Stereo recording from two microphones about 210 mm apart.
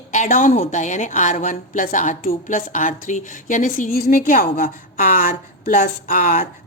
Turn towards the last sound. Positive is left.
turn(degrees=35)  # may be behind; listen again after turning